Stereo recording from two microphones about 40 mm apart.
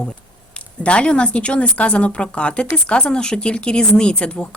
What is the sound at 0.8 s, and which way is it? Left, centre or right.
Speech, left.